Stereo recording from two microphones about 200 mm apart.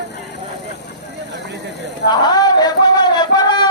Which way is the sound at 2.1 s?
20° left (ahead or behind).